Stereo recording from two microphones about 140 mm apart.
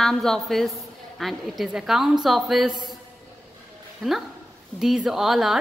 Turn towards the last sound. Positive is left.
turn(degrees=-5)  # may be behind; listen again after turning